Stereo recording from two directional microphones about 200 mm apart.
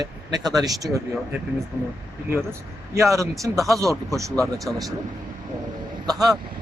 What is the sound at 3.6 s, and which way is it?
Speech, 15° right (ahead or behind).